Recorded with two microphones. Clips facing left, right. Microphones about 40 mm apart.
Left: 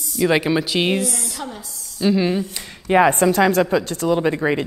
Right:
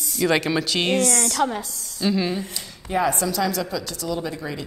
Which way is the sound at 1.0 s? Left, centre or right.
Right.